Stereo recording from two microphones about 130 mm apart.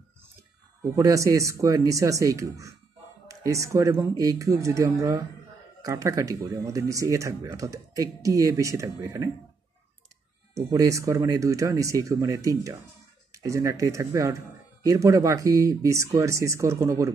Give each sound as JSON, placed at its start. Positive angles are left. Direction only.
{"t": 0.9, "sound": "speech", "side_deg": -25}
{"t": 10.5, "sound": "speech", "side_deg": -25}